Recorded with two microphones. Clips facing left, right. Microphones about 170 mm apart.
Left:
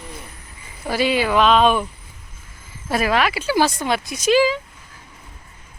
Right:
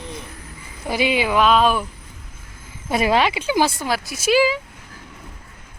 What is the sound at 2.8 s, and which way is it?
Speech, 20° right (ahead or behind).